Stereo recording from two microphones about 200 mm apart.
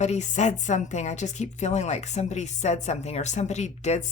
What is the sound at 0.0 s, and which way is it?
Speech, 35° left (ahead or behind).